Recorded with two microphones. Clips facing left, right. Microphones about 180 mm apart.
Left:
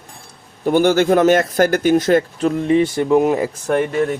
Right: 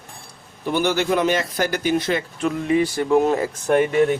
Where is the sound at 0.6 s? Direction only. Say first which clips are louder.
Left 7 dB; 45° left (ahead or behind); by 3.4 s 15° left (ahead or behind).